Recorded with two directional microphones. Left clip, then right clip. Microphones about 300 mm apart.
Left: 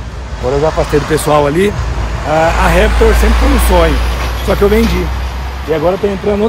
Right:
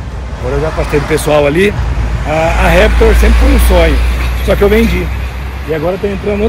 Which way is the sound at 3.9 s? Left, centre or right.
Left.